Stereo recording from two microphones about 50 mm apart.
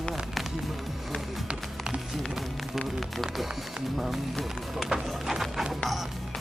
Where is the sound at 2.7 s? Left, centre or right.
Centre.